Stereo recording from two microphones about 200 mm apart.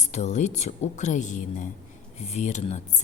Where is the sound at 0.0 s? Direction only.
35° left (ahead or behind).